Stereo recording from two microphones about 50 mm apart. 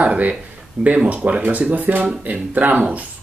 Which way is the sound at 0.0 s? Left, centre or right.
Right.